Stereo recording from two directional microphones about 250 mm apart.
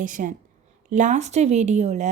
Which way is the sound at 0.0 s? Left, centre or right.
Right.